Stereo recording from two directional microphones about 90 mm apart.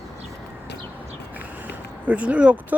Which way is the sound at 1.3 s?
20° right (ahead or behind).